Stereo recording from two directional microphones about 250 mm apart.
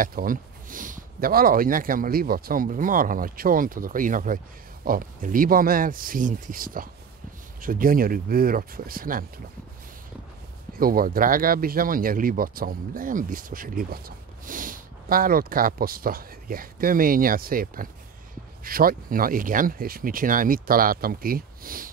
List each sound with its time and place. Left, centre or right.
0.0 s speech: right
10.8 s speech: right